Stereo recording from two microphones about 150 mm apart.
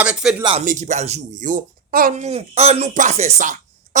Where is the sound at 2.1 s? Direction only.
50° right (ahead or behind).